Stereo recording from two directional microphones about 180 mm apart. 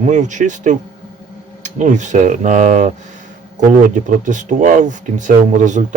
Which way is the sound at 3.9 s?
45° right (ahead or behind).